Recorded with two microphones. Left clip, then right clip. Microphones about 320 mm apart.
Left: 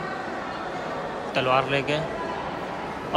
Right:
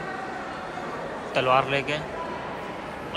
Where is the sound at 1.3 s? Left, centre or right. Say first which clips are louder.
Right 1 dB; centre.